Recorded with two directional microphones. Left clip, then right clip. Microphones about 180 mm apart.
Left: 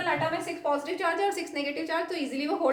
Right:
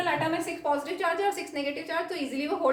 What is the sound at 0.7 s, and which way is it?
A woman's voice, 15° left (ahead or behind).